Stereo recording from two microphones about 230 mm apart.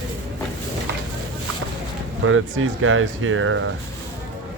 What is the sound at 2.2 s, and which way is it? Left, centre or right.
Speech, right.